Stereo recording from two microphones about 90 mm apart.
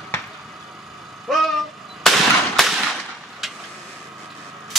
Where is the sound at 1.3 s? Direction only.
Centre (ahead or behind).